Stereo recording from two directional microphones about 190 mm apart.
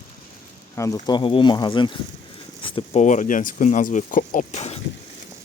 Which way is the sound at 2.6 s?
25° left (ahead or behind).